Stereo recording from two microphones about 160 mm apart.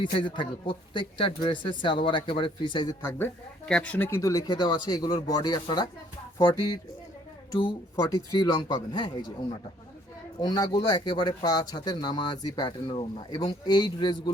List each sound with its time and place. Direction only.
0.0 s speech: 30° left (ahead or behind)
3.0 s speech: 15° left (ahead or behind)
7.5 s speech: 20° left (ahead or behind)